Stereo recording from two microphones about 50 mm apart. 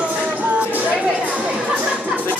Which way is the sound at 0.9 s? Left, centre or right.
Right.